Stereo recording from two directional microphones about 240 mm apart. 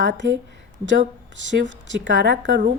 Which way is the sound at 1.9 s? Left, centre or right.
Right.